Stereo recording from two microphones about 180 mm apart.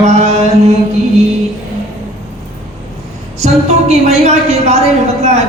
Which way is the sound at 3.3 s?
35° right (ahead or behind).